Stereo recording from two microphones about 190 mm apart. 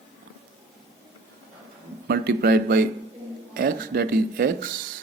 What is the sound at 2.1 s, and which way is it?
Speech, 55° right (ahead or behind).